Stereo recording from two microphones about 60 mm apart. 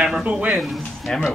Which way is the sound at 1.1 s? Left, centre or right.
Centre.